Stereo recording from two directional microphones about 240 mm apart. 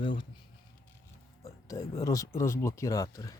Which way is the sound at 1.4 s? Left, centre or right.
Centre.